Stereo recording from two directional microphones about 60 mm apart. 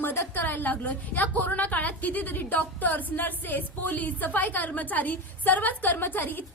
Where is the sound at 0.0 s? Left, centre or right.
Left.